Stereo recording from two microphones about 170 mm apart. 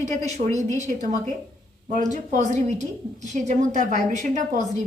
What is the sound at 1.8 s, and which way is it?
A woman's voice, 45° right (ahead or behind).